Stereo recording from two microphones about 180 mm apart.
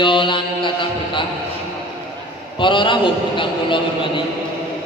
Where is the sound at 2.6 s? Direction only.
25° left (ahead or behind).